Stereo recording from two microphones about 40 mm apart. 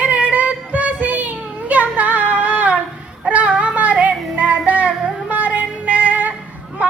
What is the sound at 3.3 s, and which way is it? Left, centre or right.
Music, right.